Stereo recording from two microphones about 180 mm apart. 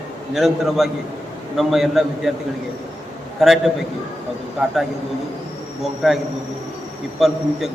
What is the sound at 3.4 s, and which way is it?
A man's voice, centre (ahead or behind).